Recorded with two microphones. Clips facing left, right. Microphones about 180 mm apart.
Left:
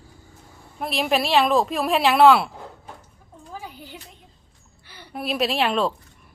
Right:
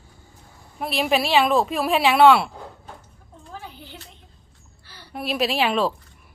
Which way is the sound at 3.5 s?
10° left (ahead or behind).